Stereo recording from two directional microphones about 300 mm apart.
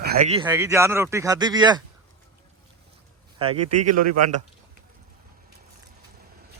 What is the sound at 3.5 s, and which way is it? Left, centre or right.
Speech, right.